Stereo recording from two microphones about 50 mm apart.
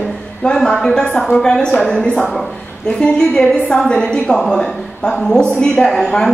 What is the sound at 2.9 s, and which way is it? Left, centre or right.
A woman's voice, centre.